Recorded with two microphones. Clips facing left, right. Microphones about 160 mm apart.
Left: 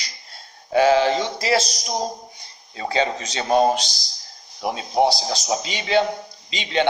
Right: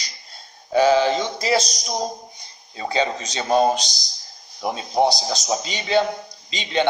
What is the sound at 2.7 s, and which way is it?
Speech, 30° right (ahead or behind).